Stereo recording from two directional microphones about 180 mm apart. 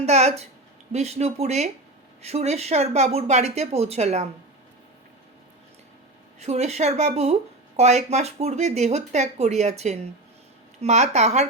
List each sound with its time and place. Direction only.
0.0 s speech: 35° right (ahead or behind)
6.4 s speech: 35° right (ahead or behind)